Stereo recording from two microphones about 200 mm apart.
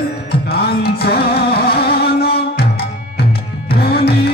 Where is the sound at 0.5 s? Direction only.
50° left (ahead or behind).